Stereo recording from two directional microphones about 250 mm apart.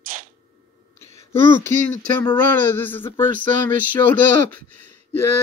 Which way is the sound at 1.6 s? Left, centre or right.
Centre.